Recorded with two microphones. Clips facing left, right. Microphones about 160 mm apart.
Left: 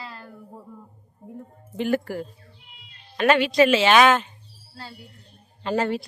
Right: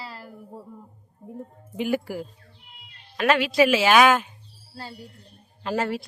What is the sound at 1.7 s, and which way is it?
A woman's voice, 10° right (ahead or behind).